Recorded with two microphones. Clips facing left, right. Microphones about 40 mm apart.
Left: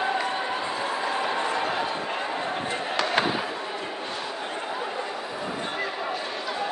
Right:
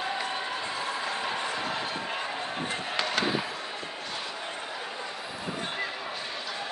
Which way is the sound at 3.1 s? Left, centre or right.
Left.